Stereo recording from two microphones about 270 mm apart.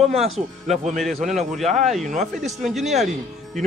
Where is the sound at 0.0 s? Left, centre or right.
Right.